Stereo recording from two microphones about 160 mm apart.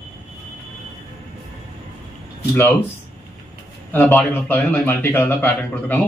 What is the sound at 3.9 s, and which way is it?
Speech, 15° left (ahead or behind).